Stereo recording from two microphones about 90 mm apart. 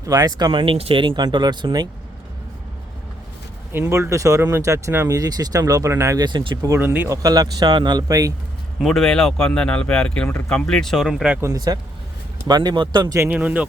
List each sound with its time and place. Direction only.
0.0 s speech: 45° right (ahead or behind)
0.6 s speech: 85° right; by 1.9 s 50° right (ahead or behind)
3.7 s speech: 25° right (ahead or behind)
5.1 s speech: 45° right (ahead or behind)
6.1 s speech: 55° right (ahead or behind)
6.7 s speech: 20° right (ahead or behind)
7.1 s speech: 45° right (ahead or behind)
8.8 s speech: centre (ahead or behind)
11.5 s speech: 45° right (ahead or behind)
13.3 s speech: 15° right (ahead or behind)